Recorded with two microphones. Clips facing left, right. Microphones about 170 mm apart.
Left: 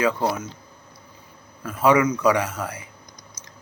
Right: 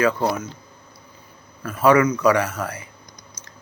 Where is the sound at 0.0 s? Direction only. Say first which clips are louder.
Right 2 dB; 10° left (ahead or behind).